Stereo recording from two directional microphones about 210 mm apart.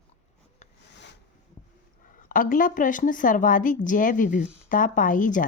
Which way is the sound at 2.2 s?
40° left (ahead or behind).